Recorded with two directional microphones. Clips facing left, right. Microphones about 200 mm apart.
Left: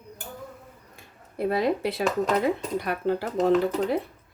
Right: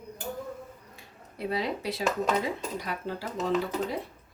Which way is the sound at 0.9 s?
50° left (ahead or behind).